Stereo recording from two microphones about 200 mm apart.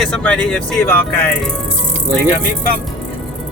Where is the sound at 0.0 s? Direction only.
5° left (ahead or behind).